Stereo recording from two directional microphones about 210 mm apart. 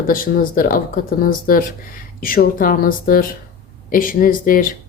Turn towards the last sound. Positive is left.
turn(degrees=40)  # may be behind; listen again after turning